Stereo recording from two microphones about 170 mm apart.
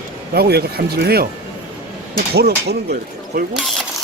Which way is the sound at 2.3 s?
70° right (ahead or behind).